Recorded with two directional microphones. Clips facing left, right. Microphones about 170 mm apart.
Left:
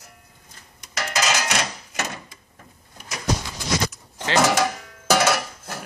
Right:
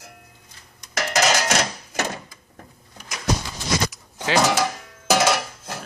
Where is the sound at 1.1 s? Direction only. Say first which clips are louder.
Right 4 dB; 40° right (ahead or behind).